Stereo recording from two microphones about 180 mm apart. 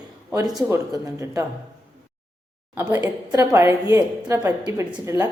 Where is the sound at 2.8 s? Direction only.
20° right (ahead or behind).